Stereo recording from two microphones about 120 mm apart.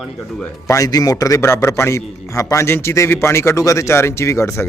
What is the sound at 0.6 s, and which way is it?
A man's voice, 30° left (ahead or behind).